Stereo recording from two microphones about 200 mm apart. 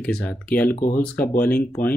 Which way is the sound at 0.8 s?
45° left (ahead or behind).